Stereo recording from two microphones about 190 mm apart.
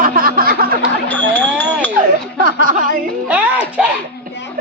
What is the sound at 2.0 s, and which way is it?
Speech, 50° right (ahead or behind).